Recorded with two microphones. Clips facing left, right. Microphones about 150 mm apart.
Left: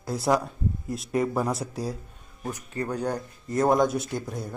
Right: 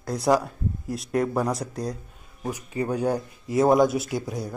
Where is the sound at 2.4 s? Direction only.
10° right (ahead or behind).